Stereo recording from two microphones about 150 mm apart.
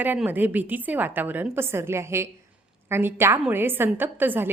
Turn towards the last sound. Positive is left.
turn(degrees=-15)  # may be behind; listen again after turning